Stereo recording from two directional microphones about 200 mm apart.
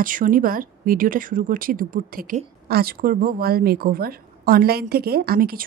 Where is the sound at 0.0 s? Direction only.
45° right (ahead or behind).